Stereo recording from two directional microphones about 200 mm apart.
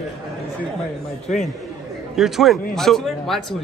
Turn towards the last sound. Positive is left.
turn(degrees=0)  # may be behind; listen again after turning